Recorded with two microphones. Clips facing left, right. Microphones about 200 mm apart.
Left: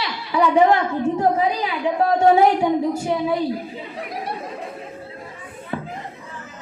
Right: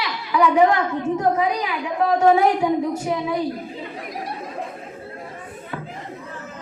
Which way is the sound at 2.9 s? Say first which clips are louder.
Left 2 dB; 30° left (ahead or behind).